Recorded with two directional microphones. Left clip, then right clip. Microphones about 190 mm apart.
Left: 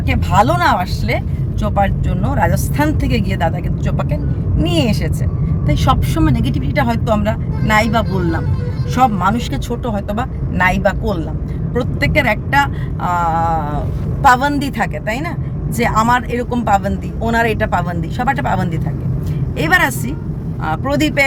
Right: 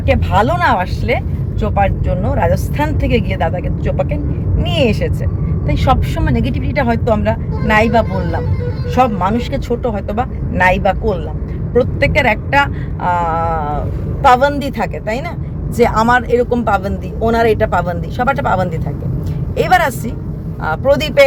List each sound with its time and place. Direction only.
0.1 s speech: 20° left (ahead or behind)
9.0 s speech: 20° left (ahead or behind)